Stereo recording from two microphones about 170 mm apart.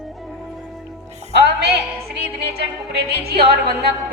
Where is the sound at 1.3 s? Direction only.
70° right (ahead or behind).